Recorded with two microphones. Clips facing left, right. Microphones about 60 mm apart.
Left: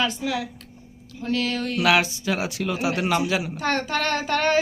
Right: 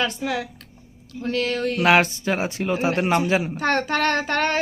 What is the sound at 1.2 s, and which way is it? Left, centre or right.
A woman's voice, right.